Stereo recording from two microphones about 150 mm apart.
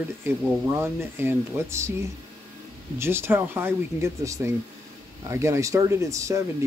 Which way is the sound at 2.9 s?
15° right (ahead or behind).